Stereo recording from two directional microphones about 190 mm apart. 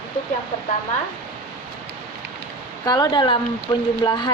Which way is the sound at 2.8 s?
20° left (ahead or behind).